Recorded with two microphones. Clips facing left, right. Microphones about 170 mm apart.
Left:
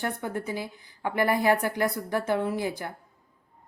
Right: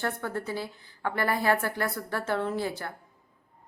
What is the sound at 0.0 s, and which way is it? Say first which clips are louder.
A woman's voice: left 1 dB; 15° left (ahead or behind).